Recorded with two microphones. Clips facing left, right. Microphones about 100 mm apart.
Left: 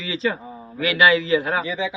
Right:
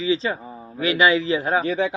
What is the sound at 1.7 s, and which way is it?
Speech, 55° right (ahead or behind).